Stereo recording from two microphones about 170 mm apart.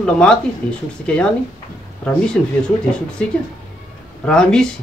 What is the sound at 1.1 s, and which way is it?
Speech, 5° left (ahead or behind).